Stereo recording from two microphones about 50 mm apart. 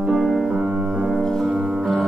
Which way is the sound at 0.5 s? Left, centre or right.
Centre.